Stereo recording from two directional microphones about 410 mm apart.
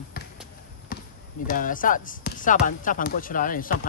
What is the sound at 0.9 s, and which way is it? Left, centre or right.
Basketball bounce, left.